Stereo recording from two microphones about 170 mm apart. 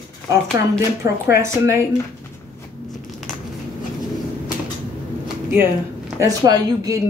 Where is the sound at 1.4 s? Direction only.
15° right (ahead or behind).